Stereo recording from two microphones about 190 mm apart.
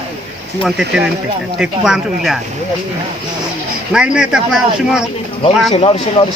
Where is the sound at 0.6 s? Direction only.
5° right (ahead or behind).